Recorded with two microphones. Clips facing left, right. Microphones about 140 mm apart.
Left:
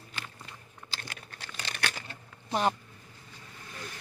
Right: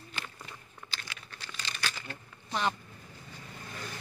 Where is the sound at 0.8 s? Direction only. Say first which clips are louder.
Left 2 dB; 35° left (ahead or behind).